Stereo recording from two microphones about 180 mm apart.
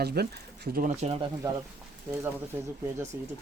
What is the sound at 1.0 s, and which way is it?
Speech, 35° right (ahead or behind).